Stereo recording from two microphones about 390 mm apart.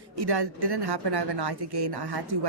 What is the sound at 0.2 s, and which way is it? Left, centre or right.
A woman's voice, right.